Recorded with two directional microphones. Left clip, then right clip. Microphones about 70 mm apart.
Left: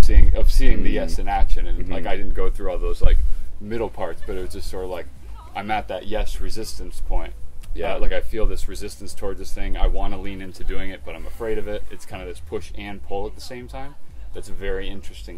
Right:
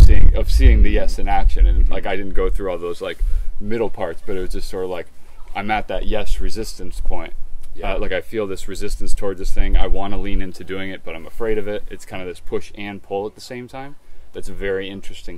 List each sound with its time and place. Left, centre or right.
0.1 s speech: right